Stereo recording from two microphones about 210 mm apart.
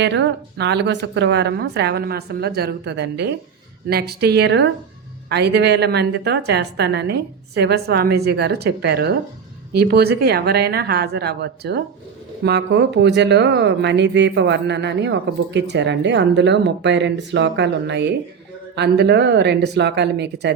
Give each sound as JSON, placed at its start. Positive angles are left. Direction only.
{"t": 0.0, "sound": "a woman's voice", "side_deg": -55}